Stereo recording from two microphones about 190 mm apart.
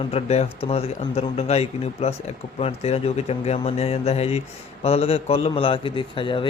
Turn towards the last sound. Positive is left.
turn(degrees=25)  # may be behind; listen again after turning